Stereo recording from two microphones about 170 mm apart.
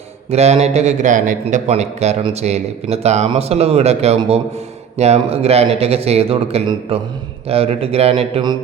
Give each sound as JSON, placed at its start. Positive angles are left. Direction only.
{"t": 0.3, "sound": "a man's voice", "side_deg": -40}